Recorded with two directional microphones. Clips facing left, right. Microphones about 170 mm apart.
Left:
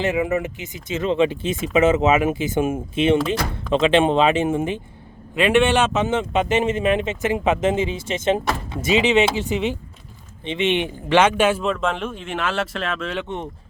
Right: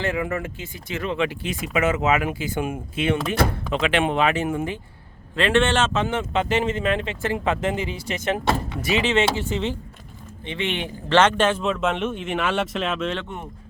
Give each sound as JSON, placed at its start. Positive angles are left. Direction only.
{"t": 0.0, "sound": "speech", "side_deg": 20}
{"t": 11.7, "sound": "speech", "side_deg": -5}
{"t": 13.2, "sound": "speech", "side_deg": 25}